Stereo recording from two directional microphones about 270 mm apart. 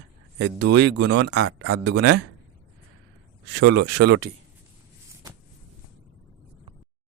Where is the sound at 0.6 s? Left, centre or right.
Right.